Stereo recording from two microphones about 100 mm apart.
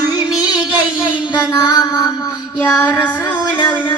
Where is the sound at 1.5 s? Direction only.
40° left (ahead or behind).